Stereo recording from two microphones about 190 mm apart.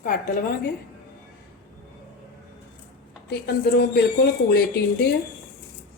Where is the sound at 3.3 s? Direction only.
55° left (ahead or behind).